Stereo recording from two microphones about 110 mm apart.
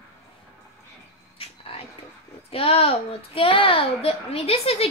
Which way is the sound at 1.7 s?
60° left (ahead or behind).